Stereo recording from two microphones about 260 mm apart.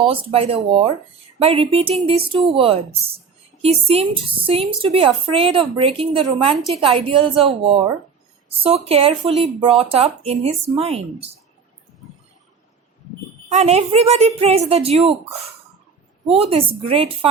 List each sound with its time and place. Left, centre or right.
0.1 s a woman's voice: right
13.5 s a woman's voice: right